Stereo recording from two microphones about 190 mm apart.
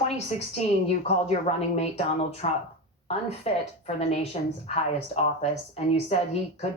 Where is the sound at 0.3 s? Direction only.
35° left (ahead or behind).